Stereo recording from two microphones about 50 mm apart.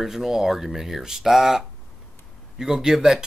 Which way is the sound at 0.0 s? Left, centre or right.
Centre.